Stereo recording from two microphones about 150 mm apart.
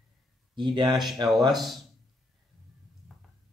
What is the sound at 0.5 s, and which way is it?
Speech, 30° right (ahead or behind).